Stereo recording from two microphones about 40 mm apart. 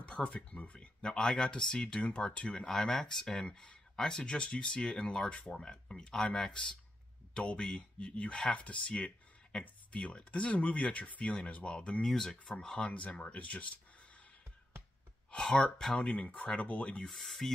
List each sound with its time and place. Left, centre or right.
0.0 s a sound: left
0.6 s speech: left
1.1 s speech: centre
3.3 s speech: left
8.0 s speech: left
12.0 s speech: centre
12.8 s speech: left
15.3 s speech: left
17.1 s speech: centre